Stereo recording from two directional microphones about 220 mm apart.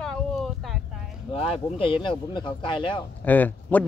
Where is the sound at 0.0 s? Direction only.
Centre (ahead or behind).